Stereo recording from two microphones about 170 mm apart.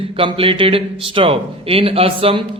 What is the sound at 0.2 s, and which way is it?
A man's voice, 30° right (ahead or behind).